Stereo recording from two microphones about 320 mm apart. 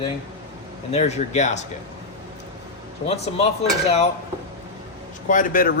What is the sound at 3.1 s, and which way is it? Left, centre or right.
Speech, centre.